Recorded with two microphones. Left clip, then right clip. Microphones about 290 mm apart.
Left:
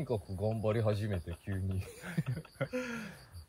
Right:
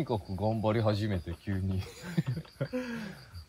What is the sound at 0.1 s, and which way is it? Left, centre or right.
Speech, right.